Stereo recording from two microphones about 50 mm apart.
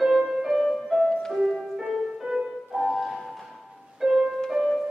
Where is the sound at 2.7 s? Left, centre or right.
Centre.